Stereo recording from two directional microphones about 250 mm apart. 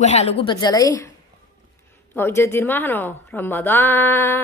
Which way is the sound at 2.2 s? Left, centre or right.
Centre.